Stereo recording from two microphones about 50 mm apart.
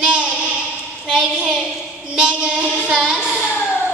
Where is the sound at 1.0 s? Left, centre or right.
Centre.